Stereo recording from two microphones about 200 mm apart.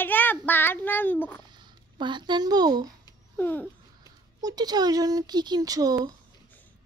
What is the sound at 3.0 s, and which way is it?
Babbling, 10° left (ahead or behind).